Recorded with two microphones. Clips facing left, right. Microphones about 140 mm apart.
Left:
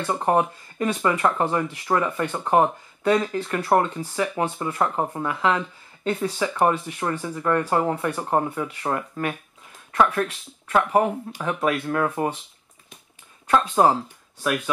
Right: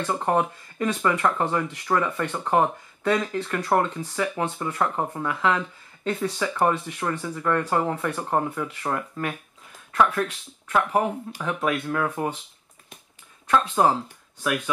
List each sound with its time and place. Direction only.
0.0 s speech: 15° left (ahead or behind)
11.4 s speech: 15° left (ahead or behind)
12.2 s speech: 5° left (ahead or behind)
13.5 s speech: 20° left (ahead or behind)